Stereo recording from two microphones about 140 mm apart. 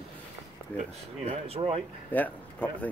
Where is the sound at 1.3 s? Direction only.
45° right (ahead or behind).